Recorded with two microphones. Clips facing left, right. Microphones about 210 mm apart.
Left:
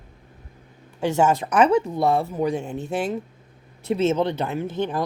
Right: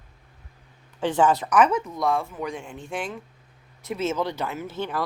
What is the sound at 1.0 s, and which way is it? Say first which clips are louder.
Speech: left 1 dB; 10° left (ahead or behind).